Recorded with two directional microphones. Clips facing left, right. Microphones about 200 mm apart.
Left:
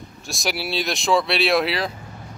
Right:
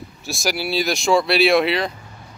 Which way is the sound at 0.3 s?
Centre (ahead or behind).